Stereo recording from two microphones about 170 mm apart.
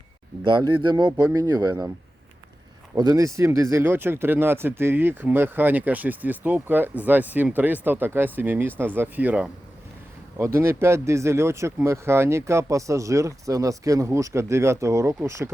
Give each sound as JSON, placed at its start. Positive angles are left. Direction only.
{"t": 0.4, "sound": "speech", "side_deg": -25}
{"t": 2.9, "sound": "speech", "side_deg": -20}